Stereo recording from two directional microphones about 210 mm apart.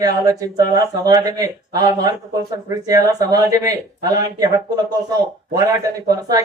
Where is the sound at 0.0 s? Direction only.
15° right (ahead or behind).